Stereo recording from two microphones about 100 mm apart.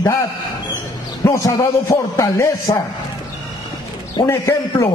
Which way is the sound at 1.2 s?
35° left (ahead or behind).